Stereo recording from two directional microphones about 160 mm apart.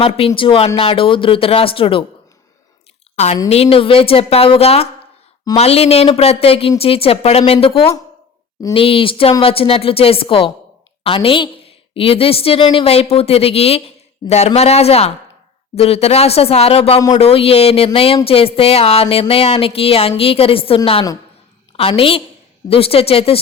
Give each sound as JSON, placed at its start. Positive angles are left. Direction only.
{"t": 0.0, "sound": "a woman's voice", "side_deg": 35}
{"t": 3.5, "sound": "a woman's voice", "side_deg": 35}